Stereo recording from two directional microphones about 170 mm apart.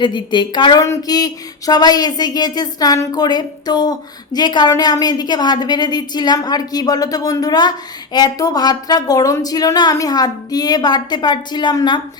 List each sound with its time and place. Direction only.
0.0 s speech: 25° left (ahead or behind)